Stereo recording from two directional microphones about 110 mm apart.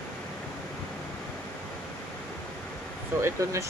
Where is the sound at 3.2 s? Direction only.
25° right (ahead or behind).